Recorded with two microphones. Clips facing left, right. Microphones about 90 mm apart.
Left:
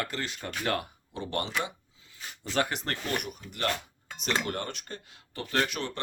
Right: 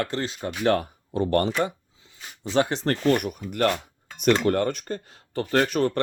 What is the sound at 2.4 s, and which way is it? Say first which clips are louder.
Speech: right 7 dB; 20° right (ahead or behind).